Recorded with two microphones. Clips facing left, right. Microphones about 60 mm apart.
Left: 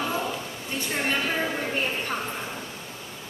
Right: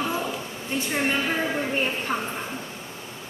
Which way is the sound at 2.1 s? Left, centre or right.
Centre.